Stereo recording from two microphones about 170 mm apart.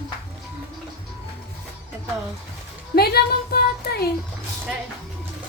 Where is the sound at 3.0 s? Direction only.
65° left (ahead or behind).